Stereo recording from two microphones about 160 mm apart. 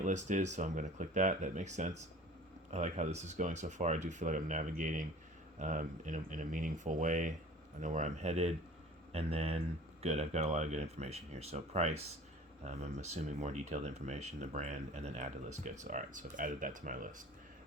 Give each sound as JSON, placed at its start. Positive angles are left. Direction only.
{"t": 0.0, "sound": "speech", "side_deg": -50}